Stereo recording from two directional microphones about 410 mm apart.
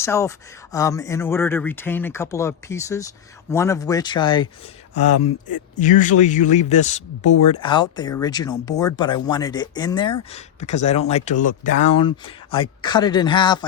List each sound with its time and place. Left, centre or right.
0.0 s speech: centre
5.7 s speech: centre